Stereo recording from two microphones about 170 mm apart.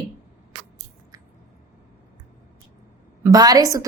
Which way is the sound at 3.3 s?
20° right (ahead or behind).